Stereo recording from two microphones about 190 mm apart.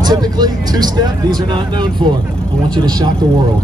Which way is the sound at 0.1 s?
20° right (ahead or behind).